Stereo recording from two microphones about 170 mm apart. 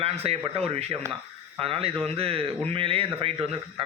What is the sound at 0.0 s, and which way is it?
A man's voice, 35° right (ahead or behind).